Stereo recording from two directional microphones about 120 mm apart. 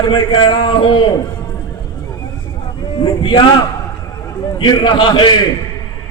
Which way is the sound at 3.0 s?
45° left (ahead or behind).